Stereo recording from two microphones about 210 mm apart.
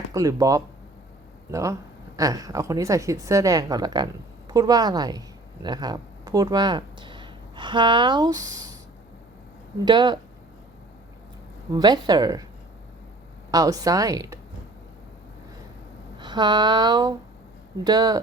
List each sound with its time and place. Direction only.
0.1 s a woman's voice: 15° right (ahead or behind)
9.8 s speech: 20° right (ahead or behind)
11.7 s speech: 20° right (ahead or behind)
13.5 s a woman's voice: 15° right (ahead or behind)
16.1 s speech: 20° right (ahead or behind)